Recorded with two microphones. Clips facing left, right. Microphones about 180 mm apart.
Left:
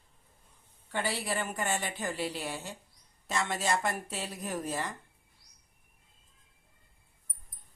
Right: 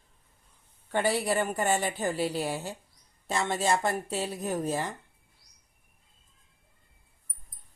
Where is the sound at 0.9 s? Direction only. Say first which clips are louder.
Right 7 dB; 45° right (ahead or behind); by 4.9 s 25° right (ahead or behind).